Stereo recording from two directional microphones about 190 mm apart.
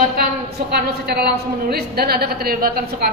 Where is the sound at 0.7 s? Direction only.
55° right (ahead or behind).